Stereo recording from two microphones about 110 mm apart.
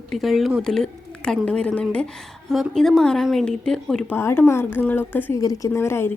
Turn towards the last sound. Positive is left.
turn(degrees=20)  # may be behind; listen again after turning